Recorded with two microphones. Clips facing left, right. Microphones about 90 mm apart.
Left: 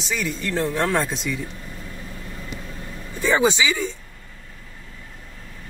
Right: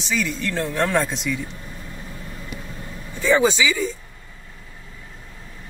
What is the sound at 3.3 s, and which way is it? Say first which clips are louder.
Speech: left 2 dB; 20° left (ahead or behind).